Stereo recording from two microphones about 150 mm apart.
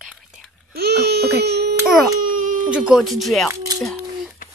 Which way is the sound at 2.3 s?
60° right (ahead or behind).